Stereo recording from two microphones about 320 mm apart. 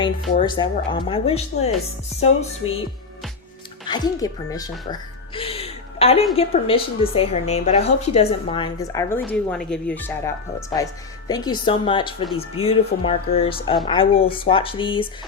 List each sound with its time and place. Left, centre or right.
0.0 s speech: centre
3.8 s speech: centre
4.9 s music: centre
6.3 s speech: centre
12.6 s speech: left
13.1 s speech: centre